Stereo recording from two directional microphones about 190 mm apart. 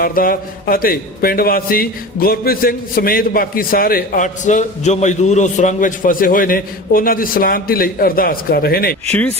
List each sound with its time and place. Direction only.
0.0 s a man's voice: 50° left (ahead or behind)
9.0 s speech: 5° left (ahead or behind)